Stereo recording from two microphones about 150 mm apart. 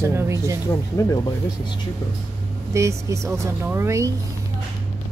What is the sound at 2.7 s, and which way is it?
A woman's voice, 20° right (ahead or behind).